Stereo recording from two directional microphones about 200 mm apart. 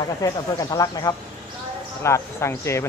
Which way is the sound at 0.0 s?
20° left (ahead or behind).